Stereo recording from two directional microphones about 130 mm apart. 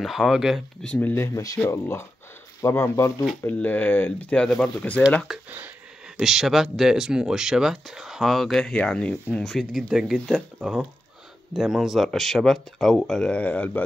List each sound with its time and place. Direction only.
0.0 s speech: centre (ahead or behind)
0.9 s speech: 15° left (ahead or behind)